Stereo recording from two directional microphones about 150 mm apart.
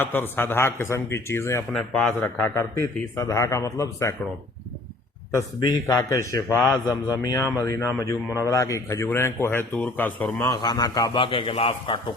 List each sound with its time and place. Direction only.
0.0 s speech: 15° left (ahead or behind)
1.7 s a man's voice: 5° left (ahead or behind)
2.2 s speech: 20° left (ahead or behind)
5.5 s speech: 25° left (ahead or behind)
10.5 s a man's voice: 25° left (ahead or behind)